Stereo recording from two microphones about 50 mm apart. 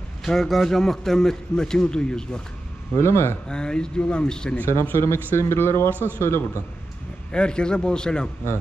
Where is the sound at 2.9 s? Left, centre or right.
Left.